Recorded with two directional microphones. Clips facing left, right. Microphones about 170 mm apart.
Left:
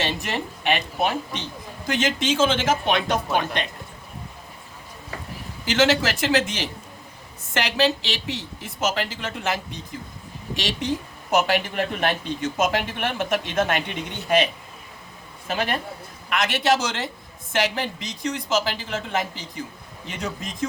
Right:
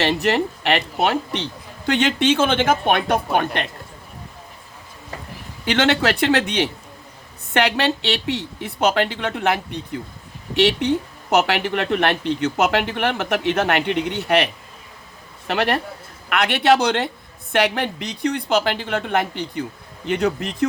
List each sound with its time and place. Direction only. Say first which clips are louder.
0.0 s speech: right 8 dB; 65° right (ahead or behind)
5.6 s speech: right 2 dB; 60° right (ahead or behind)